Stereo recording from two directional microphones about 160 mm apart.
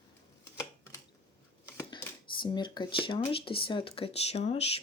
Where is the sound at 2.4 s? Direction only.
30° left (ahead or behind).